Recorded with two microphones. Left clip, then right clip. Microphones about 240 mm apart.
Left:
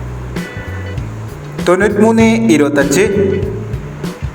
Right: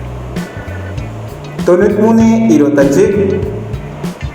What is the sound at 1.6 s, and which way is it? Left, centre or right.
Speech, left.